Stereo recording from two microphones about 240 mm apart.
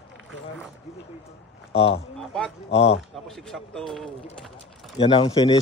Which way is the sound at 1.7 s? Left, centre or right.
Left.